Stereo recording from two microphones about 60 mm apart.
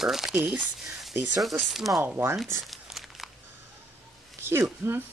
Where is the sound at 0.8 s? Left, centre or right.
Centre.